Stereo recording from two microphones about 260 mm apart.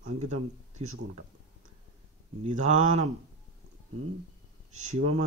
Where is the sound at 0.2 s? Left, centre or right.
Right.